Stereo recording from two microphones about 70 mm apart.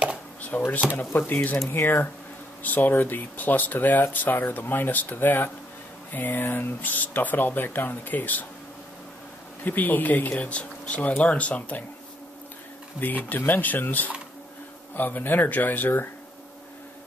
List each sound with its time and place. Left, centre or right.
0.5 s speech: left
9.7 s speech: left
13.0 s speech: left